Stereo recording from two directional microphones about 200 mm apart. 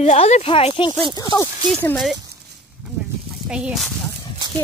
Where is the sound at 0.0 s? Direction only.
30° left (ahead or behind).